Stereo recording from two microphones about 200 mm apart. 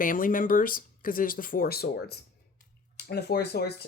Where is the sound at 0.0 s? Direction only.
45° left (ahead or behind).